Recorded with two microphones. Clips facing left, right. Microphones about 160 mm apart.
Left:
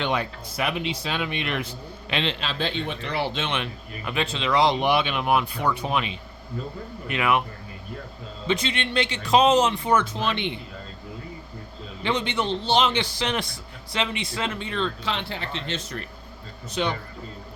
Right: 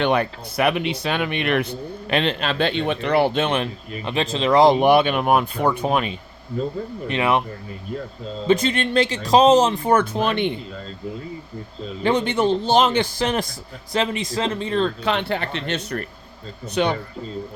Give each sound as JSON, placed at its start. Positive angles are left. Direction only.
{"t": 0.0, "sound": "speech", "side_deg": -60}
{"t": 3.6, "sound": "speech", "side_deg": -30}
{"t": 7.1, "sound": "a man's voice", "side_deg": -30}
{"t": 8.4, "sound": "speech", "side_deg": -45}
{"t": 12.0, "sound": "a man's voice", "side_deg": -50}
{"t": 15.0, "sound": "speech", "side_deg": -60}